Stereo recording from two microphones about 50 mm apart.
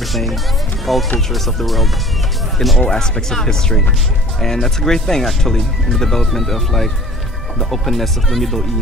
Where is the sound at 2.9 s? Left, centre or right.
Centre.